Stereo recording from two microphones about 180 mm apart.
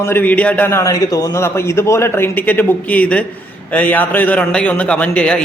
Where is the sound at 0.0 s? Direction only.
10° left (ahead or behind).